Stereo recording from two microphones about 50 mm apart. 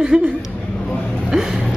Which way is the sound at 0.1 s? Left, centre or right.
Right.